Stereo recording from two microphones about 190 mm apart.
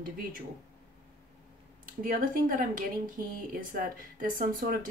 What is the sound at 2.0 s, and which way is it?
Speech, 45° right (ahead or behind).